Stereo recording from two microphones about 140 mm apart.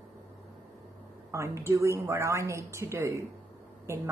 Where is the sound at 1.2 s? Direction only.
20° right (ahead or behind).